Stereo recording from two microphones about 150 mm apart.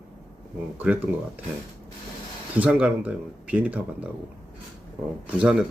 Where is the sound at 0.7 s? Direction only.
10° right (ahead or behind).